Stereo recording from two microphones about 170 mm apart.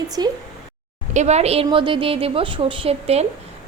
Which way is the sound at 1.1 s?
40° right (ahead or behind).